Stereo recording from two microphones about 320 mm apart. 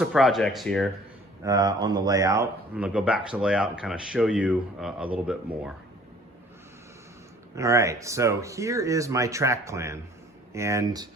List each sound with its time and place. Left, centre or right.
0.0 s speech: centre
1.4 s speech: centre
7.5 s speech: centre